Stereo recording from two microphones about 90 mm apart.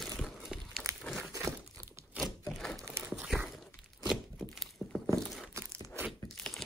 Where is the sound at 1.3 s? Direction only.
35° right (ahead or behind).